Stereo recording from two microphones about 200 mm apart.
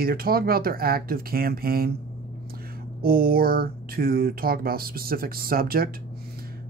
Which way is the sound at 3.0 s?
45° right (ahead or behind).